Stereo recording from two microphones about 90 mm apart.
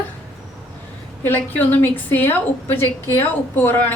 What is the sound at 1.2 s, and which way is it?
A woman's voice, 20° left (ahead or behind).